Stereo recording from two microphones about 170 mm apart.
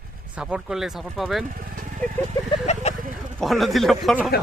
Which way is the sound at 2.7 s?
40° left (ahead or behind).